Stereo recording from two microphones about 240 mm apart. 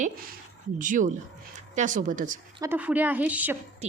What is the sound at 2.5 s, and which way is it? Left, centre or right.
A woman's voice, centre.